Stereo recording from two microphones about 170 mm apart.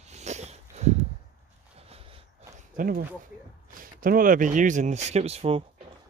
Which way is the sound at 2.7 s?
60° right (ahead or behind).